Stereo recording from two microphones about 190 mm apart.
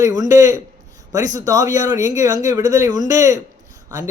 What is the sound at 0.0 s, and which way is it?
Speech, 20° right (ahead or behind).